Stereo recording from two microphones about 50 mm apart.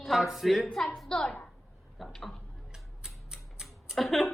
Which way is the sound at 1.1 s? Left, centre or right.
Centre.